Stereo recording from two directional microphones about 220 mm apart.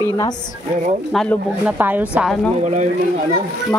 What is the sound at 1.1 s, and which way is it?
A woman's voice, centre (ahead or behind).